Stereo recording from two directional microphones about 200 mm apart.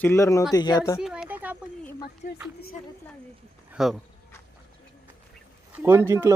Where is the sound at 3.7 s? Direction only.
Centre (ahead or behind).